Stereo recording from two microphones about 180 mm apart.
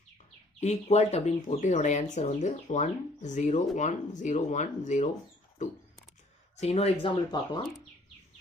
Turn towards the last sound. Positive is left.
turn(degrees=25)  # may be behind; listen again after turning